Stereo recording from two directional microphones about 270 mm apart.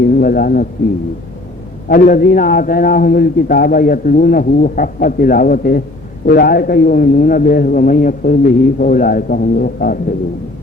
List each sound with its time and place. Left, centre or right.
0.1 s speech: left
1.9 s a man's voice: left